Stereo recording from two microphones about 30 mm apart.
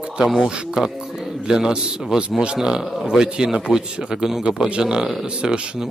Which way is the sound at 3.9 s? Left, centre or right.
Right.